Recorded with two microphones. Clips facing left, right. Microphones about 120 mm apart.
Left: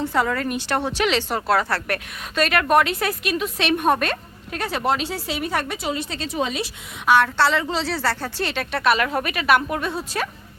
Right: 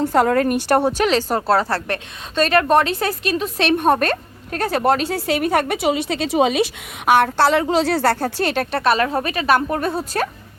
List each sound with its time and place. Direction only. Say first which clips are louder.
0.0 s speech: right 6 dB; 45° right (ahead or behind)
0.9 s a woman's voice: right 4 dB; 40° right (ahead or behind)